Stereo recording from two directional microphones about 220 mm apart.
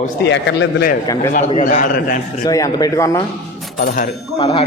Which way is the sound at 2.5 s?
15° left (ahead or behind).